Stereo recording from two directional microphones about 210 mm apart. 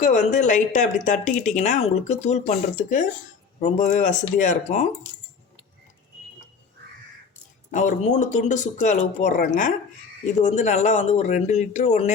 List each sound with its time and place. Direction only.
0.0 s speech: 35° left (ahead or behind)
7.7 s speech: 35° left (ahead or behind)